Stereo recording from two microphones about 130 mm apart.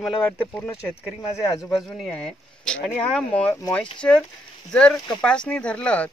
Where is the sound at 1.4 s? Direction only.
25° left (ahead or behind).